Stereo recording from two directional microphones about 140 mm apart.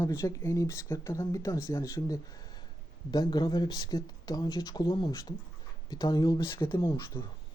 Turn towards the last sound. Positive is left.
turn(degrees=25)  # may be behind; listen again after turning